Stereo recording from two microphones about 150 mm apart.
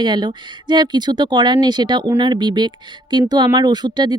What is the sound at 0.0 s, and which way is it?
Speech, 30° right (ahead or behind).